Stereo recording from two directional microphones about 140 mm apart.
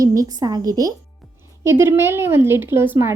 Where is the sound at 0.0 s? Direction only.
25° right (ahead or behind).